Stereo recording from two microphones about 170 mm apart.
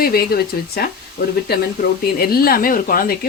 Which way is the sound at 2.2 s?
60° left (ahead or behind).